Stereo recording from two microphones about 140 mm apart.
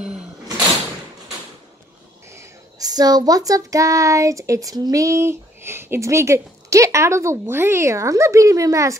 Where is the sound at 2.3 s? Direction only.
20° right (ahead or behind).